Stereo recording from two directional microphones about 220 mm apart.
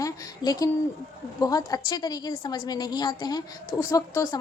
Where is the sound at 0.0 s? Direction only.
15° left (ahead or behind).